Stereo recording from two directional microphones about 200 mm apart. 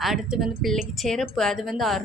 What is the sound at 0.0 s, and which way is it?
A woman's voice, centre (ahead or behind).